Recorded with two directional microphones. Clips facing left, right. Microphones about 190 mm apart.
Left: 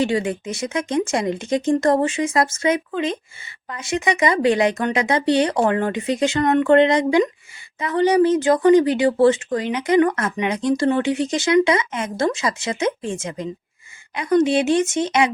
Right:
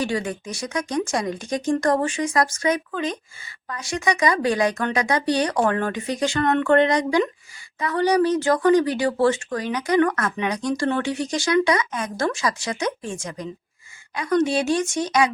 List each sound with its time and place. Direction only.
0.0 s speech: 20° left (ahead or behind)